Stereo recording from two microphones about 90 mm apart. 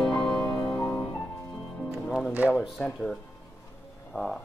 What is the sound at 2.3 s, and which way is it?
Speech, 15° right (ahead or behind).